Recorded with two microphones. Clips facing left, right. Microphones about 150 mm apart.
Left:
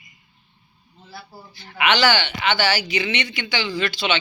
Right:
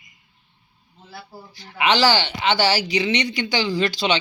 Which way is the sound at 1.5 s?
30° right (ahead or behind).